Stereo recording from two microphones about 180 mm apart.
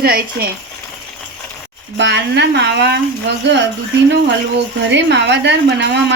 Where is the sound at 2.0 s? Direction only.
75° right (ahead or behind).